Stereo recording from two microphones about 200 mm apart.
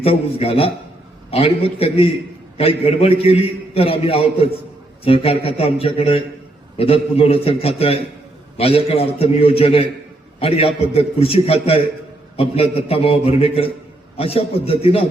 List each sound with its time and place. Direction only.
0.0 s a man's voice: 30° left (ahead or behind)